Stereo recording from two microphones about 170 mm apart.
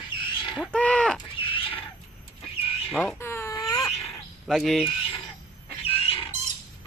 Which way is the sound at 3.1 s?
15° left (ahead or behind).